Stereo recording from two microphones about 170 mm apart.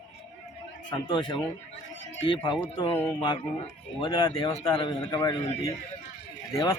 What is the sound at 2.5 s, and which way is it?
Speech, 25° left (ahead or behind).